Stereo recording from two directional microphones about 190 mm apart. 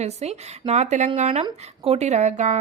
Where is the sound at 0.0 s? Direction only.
35° right (ahead or behind).